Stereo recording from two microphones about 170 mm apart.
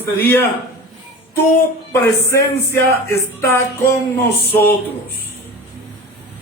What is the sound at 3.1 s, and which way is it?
Speech, 15° left (ahead or behind).